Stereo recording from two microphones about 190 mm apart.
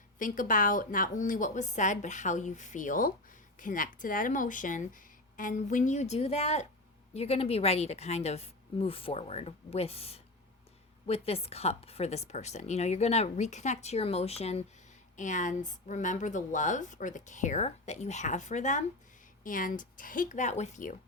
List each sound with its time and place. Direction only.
0.2 s speech: 45° left (ahead or behind)